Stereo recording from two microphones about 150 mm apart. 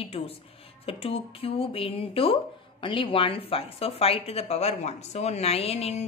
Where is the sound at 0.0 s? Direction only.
40° left (ahead or behind).